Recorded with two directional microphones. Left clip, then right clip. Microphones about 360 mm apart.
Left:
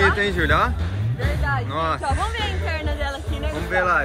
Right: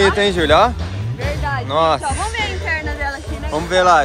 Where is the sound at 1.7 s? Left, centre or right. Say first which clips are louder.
Right 11 dB; centre.